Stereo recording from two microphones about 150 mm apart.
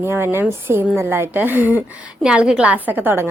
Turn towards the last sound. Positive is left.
turn(degrees=-15)  # may be behind; listen again after turning